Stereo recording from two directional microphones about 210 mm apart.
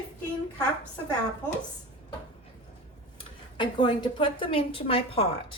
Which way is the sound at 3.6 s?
20° left (ahead or behind).